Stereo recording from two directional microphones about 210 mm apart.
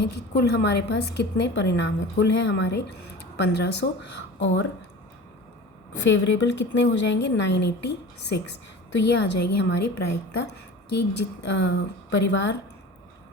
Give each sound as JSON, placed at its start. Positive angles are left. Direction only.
{"t": 0.0, "sound": "a woman's voice", "side_deg": 55}
{"t": 5.9, "sound": "a woman's voice", "side_deg": 60}